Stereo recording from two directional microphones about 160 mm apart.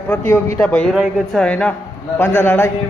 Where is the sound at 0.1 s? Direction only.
15° left (ahead or behind).